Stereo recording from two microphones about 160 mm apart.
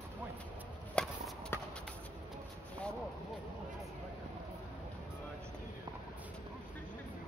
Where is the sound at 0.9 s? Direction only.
10° left (ahead or behind).